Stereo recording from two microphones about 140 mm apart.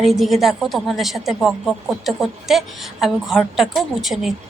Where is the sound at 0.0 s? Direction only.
Centre (ahead or behind).